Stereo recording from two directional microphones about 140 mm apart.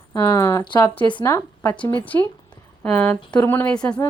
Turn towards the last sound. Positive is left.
turn(degrees=5)  # may be behind; listen again after turning